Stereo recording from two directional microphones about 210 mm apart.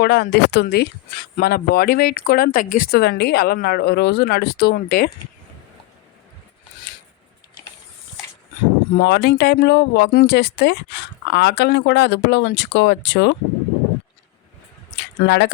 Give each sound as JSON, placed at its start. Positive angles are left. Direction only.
{"t": 0.0, "sound": "speech", "side_deg": 50}
{"t": 9.0, "sound": "speech", "side_deg": 55}
{"t": 14.9, "sound": "a sound", "side_deg": 55}